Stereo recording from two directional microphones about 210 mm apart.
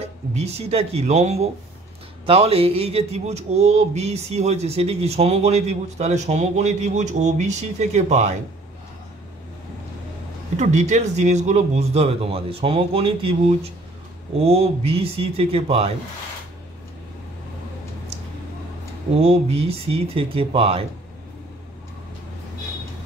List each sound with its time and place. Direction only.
0.0 s a sound: 30° right (ahead or behind)
10.6 s speech: 35° right (ahead or behind)
14.4 s speech: 30° right (ahead or behind)
19.2 s speech: 30° right (ahead or behind)